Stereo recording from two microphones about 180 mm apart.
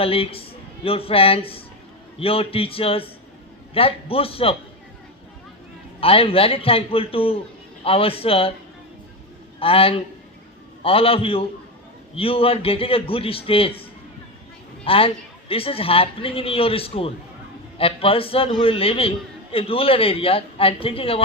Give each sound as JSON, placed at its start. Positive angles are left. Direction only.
{"t": 0.0, "sound": "a man's voice", "side_deg": 30}
{"t": 6.0, "sound": "a man's voice", "side_deg": 30}
{"t": 9.6, "sound": "a man's voice", "side_deg": 30}
{"t": 14.8, "sound": "a man's voice", "side_deg": 30}